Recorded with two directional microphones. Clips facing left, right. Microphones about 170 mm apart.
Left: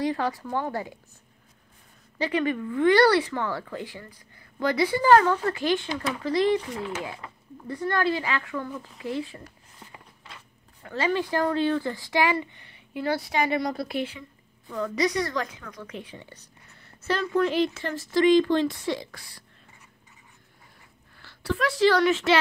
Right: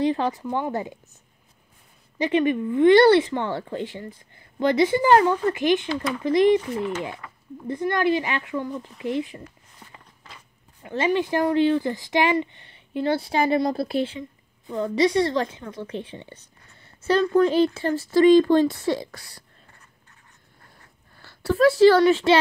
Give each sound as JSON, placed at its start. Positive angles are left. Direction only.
{"t": 0.0, "sound": "speech", "side_deg": -25}
{"t": 2.1, "sound": "speech", "side_deg": -20}
{"t": 7.6, "sound": "speech", "side_deg": -20}
{"t": 10.8, "sound": "speech", "side_deg": -20}
{"t": 16.8, "sound": "a sound", "side_deg": -30}
{"t": 17.4, "sound": "speech", "side_deg": -35}
{"t": 21.2, "sound": "a woman's voice", "side_deg": -40}